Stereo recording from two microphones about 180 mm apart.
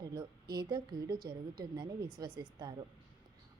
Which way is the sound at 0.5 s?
25° right (ahead or behind).